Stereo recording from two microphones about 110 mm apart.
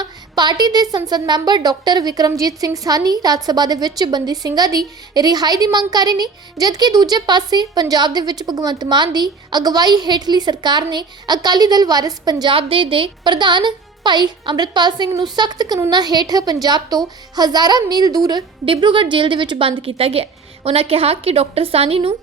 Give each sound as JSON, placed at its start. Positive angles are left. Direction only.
{"t": 0.0, "sound": "a woman's voice", "side_deg": -40}
{"t": 12.5, "sound": "a woman's voice", "side_deg": -55}
{"t": 18.6, "sound": "a woman's voice", "side_deg": -50}